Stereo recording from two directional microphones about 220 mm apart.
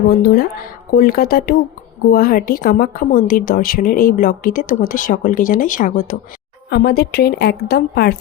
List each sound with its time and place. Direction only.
0.1 s a woman's voice: 45° left (ahead or behind)